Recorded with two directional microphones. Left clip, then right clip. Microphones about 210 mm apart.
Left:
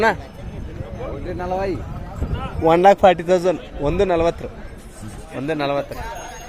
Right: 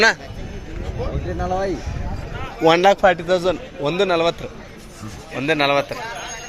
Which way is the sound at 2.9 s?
35° left (ahead or behind).